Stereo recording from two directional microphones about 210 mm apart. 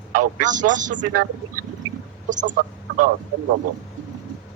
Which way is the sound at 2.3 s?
35° right (ahead or behind).